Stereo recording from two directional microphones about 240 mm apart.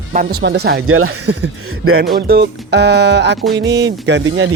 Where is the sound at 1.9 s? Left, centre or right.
Right.